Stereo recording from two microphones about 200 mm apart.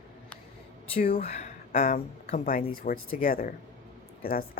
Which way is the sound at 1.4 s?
45° left (ahead or behind).